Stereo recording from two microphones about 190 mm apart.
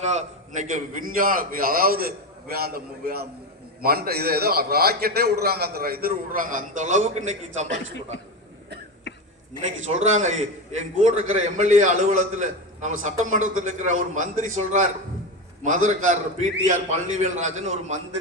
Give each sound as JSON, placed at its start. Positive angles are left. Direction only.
{"t": 0.0, "sound": "a man's voice", "side_deg": -35}
{"t": 9.6, "sound": "a man's voice", "side_deg": -35}
{"t": 17.6, "sound": "a man's voice", "side_deg": -35}